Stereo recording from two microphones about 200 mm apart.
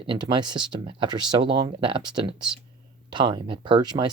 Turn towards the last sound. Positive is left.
turn(degrees=-20)  # may be behind; listen again after turning